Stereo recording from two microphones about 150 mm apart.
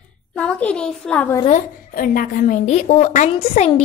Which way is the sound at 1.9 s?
70° left (ahead or behind).